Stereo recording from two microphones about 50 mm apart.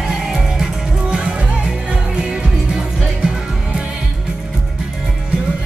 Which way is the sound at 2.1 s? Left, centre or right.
Centre.